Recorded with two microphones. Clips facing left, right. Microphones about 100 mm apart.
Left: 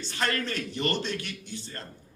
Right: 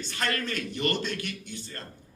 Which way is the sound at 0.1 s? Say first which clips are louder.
Left 2 dB; 40° left (ahead or behind).